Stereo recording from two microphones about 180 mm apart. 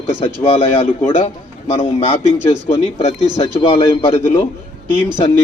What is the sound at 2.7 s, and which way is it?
A man's voice, 30° left (ahead or behind).